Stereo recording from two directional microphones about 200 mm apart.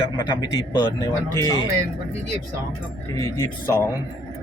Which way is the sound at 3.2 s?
15° left (ahead or behind).